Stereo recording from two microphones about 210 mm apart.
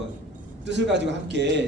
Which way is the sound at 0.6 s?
55° right (ahead or behind).